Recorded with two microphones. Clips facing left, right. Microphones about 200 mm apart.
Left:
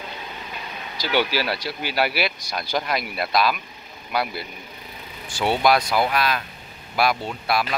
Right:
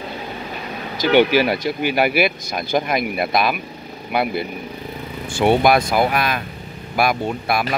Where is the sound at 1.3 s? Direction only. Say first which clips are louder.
Right 8 dB; 20° right (ahead or behind).